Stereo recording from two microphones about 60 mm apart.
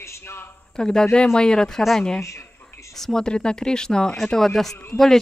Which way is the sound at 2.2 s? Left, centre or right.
Left.